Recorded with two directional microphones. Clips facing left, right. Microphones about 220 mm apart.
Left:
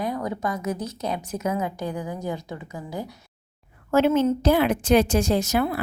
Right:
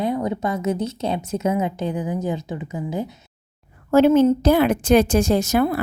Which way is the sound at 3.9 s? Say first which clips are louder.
Right 5 dB; 35° right (ahead or behind).